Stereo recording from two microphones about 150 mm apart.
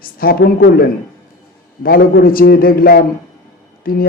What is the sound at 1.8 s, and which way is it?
Speech, 80° left.